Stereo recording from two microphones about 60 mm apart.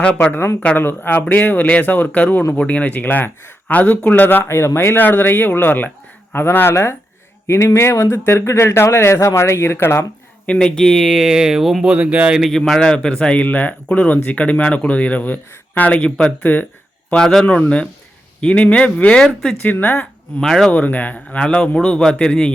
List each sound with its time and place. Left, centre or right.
0.0 s speech: centre
0.8 s speech: left
4.4 s speech: left
7.4 s speech: left
10.4 s speech: centre
11.2 s speech: centre
11.9 s speech: right
12.5 s speech: centre; by 16.6 s left
17.2 s speech: centre
17.5 s speech: centre
19.6 s speech: left
20.4 s speech: centre
20.7 s speech: left
21.3 s speech: centre